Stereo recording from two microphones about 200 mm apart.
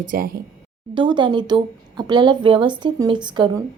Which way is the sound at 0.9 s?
25° right (ahead or behind).